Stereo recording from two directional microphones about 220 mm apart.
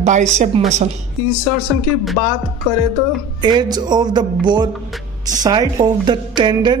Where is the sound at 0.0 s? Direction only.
35° right (ahead or behind).